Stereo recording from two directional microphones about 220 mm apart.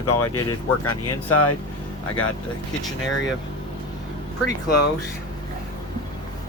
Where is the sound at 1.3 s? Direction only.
90° left.